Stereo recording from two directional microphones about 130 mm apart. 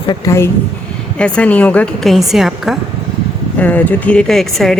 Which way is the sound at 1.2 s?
10° left (ahead or behind).